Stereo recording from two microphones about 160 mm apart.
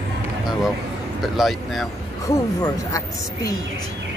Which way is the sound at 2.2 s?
20° left (ahead or behind).